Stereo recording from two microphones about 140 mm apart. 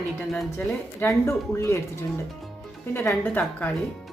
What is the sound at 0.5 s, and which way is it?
A woman's voice, 20° left (ahead or behind).